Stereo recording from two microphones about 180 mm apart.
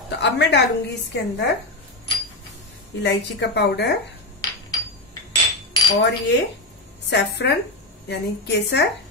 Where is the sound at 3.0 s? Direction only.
70° left (ahead or behind).